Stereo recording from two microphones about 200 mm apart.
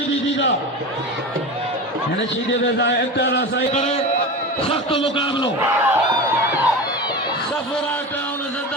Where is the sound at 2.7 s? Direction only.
60° left (ahead or behind).